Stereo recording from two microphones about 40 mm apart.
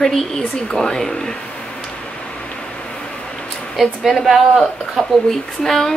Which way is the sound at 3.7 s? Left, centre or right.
Centre.